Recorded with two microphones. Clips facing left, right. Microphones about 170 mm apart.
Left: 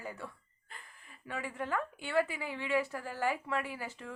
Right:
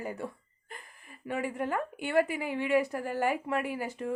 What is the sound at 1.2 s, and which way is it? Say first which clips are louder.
A woman's voice: right 6 dB; 50° right (ahead or behind).